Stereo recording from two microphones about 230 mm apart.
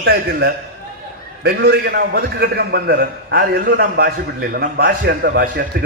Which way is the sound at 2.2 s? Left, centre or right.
Right.